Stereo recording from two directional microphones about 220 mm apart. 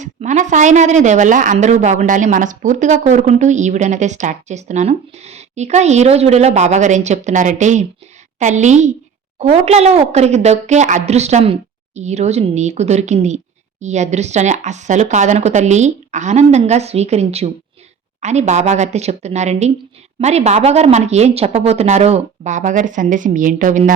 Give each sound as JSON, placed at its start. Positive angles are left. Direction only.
{"t": 0.0, "sound": "a woman's voice", "side_deg": -35}